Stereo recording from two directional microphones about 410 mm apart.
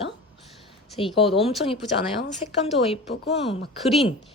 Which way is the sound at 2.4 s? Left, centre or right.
Centre.